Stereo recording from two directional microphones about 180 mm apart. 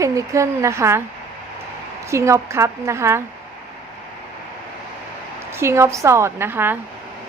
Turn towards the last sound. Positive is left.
turn(degrees=-10)  # may be behind; listen again after turning